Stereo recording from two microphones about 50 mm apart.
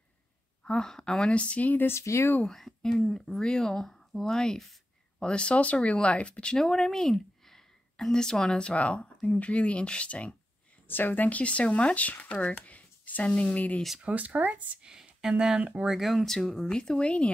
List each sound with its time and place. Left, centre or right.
0.7 s speech: centre
1.3 s speech: left
1.9 s speech: left
2.5 s speech: centre; by 6.5 s left
6.5 s speech: centre; by 10.3 s left
10.9 s speech: left
14.0 s speech: right
14.8 s speech: centre
15.8 s speech: centre; by 17.3 s left